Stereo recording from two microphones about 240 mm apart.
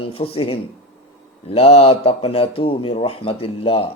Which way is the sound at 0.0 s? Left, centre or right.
Left.